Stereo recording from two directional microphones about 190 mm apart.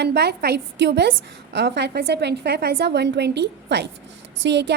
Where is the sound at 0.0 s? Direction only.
60° right (ahead or behind).